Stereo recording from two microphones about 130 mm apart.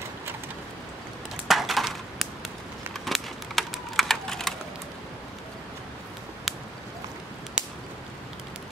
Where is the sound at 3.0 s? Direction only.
Centre (ahead or behind).